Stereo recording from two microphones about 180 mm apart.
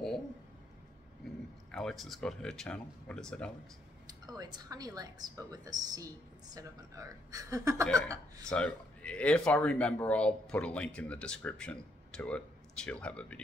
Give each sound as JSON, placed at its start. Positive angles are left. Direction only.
{"t": 1.7, "sound": "speech", "side_deg": 5}
{"t": 4.1, "sound": "a woman's voice", "side_deg": -20}
{"t": 8.5, "sound": "speech", "side_deg": 5}